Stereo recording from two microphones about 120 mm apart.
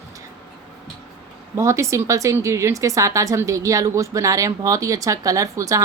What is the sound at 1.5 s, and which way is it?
A woman's voice, 25° right (ahead or behind).